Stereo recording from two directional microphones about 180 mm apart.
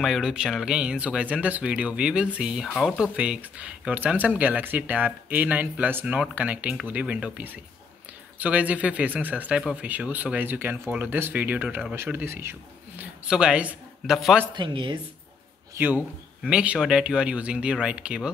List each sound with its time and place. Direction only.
0.0 s speech: 5° right (ahead or behind)
14.5 s speech: 25° right (ahead or behind)
16.4 s speech: 5° right (ahead or behind)